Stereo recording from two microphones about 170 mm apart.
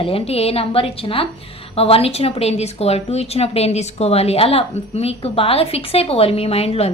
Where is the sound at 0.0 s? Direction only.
35° left (ahead or behind).